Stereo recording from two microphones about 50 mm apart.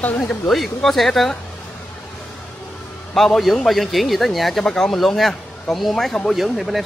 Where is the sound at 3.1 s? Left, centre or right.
Centre.